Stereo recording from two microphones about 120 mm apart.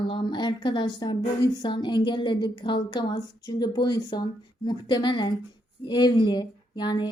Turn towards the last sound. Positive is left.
turn(degrees=35)  # may be behind; listen again after turning